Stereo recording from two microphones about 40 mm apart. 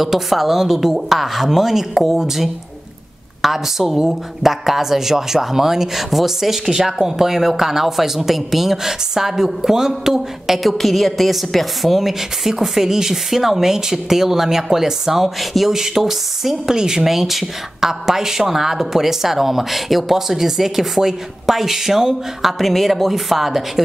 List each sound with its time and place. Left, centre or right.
0.0 s speech: centre
10.7 s speech: centre
17.0 s speech: centre